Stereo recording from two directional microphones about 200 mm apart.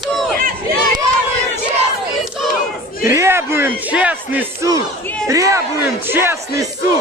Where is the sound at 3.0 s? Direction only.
15° right (ahead or behind).